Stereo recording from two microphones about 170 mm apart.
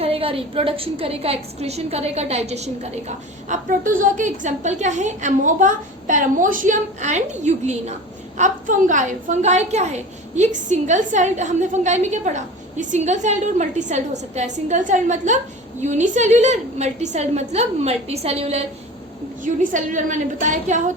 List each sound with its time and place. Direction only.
0.0 s a woman's voice: 35° right (ahead or behind)
19.4 s a woman's voice: 50° right (ahead or behind)